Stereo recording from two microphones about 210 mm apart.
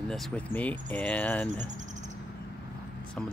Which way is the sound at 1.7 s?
35° right (ahead or behind).